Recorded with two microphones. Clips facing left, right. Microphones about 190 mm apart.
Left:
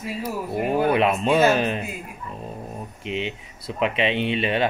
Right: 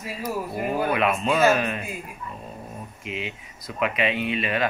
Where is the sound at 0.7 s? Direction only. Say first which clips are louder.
Left 4 dB; 30° left (ahead or behind).